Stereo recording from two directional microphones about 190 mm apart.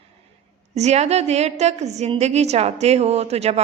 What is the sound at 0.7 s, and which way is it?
A woman's voice, 35° right (ahead or behind).